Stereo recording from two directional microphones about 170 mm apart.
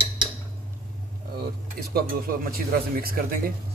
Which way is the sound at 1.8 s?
60° right (ahead or behind).